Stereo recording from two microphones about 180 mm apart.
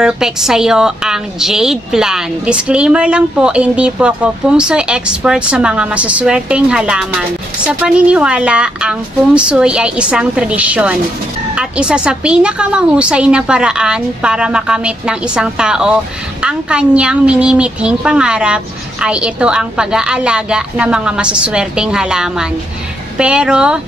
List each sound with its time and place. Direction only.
0.0 s a woman's voice: 5° right (ahead or behind)